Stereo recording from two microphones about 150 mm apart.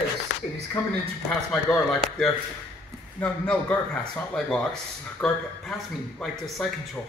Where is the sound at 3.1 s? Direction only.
10° left (ahead or behind).